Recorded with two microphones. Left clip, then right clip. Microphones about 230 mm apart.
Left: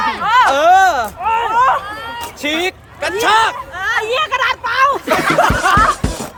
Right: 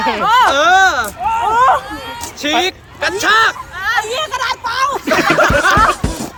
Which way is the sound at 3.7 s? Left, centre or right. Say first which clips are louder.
Even; centre.